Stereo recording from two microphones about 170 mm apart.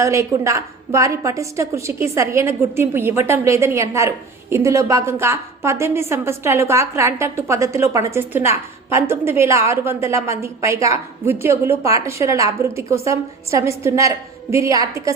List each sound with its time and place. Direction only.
0.0 s a woman's voice: 20° right (ahead or behind)